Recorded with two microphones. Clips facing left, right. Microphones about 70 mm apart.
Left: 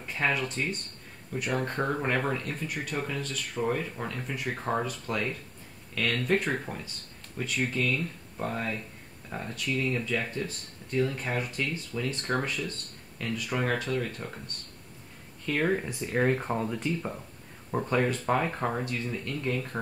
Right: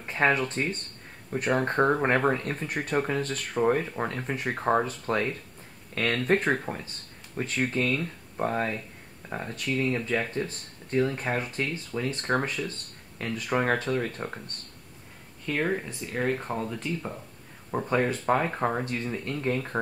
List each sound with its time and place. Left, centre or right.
0.0 s a sound: right
1.3 s speech: right
15.4 s speech: centre
17.6 s speech: centre; by 19.8 s right